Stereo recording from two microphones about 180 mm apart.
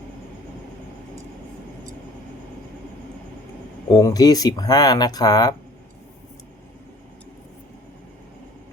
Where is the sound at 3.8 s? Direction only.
20° left (ahead or behind).